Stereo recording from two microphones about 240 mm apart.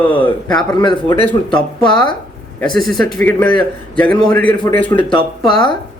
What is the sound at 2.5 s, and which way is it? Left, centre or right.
A man's voice, centre.